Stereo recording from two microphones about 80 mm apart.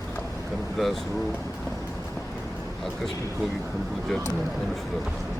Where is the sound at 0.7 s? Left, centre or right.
Centre.